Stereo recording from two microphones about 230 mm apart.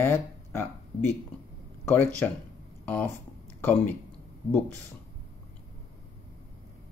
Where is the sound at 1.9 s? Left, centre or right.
Centre.